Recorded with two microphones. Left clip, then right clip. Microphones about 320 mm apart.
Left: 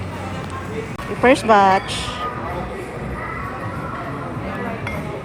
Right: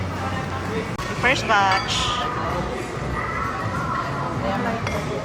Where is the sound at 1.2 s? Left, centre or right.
Centre.